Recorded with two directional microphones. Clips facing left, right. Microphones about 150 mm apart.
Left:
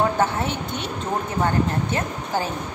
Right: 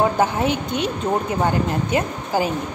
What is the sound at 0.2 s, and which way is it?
A woman's voice, 15° right (ahead or behind).